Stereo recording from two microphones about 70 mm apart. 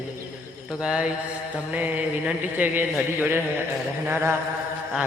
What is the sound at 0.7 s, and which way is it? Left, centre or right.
Mantra, centre.